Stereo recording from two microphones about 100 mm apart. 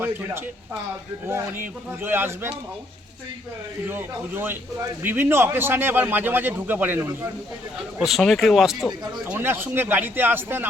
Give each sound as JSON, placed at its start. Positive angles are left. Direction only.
{"t": 1.3, "sound": "a man's voice", "side_deg": -20}
{"t": 3.8, "sound": "a man's voice", "side_deg": -20}
{"t": 7.9, "sound": "speech", "side_deg": 0}
{"t": 9.2, "sound": "a man's voice", "side_deg": -20}